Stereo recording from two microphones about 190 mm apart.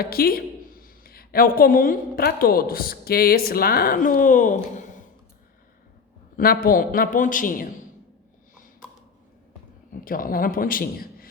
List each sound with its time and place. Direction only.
0.0 s a woman's voice: 50° left (ahead or behind)
6.3 s a man's voice: 50° left (ahead or behind)
9.9 s a man's voice: 50° left (ahead or behind)